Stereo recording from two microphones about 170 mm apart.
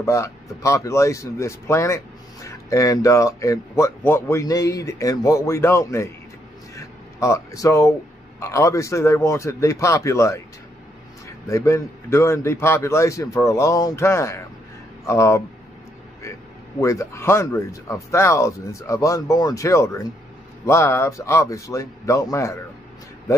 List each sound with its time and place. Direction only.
0.0 s a man's voice: 15° left (ahead or behind)
6.7 s a sound: 15° left (ahead or behind)
8.4 s a man's voice: 15° left (ahead or behind)
16.8 s a man's voice: 15° left (ahead or behind)